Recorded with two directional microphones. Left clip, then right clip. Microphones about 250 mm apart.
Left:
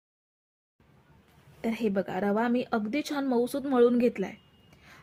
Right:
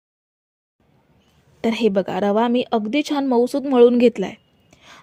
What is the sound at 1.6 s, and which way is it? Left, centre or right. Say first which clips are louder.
A woman's voice: right 11 dB; right.